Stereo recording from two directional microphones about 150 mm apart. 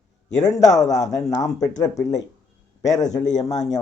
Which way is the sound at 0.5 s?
20° left (ahead or behind).